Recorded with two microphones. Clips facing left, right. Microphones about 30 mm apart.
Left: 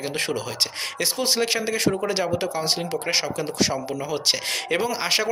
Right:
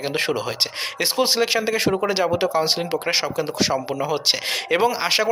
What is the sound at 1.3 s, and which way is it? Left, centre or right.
Speech, centre.